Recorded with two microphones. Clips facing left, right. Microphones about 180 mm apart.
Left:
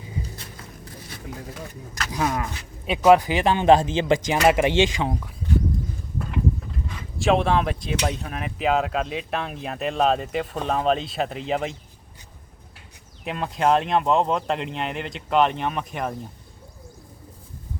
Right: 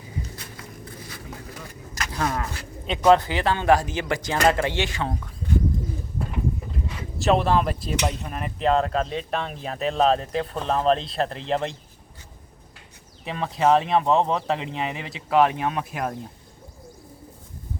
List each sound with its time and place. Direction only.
2.1 s speech: 10° left (ahead or behind)
7.2 s speech: centre (ahead or behind)
13.2 s speech: centre (ahead or behind)